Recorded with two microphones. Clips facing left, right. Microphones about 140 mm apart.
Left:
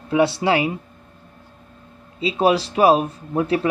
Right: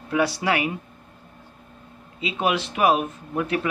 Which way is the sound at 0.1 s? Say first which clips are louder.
Left 5 dB; 25° left (ahead or behind).